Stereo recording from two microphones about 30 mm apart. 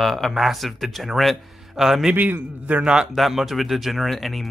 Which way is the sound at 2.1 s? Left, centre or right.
Right.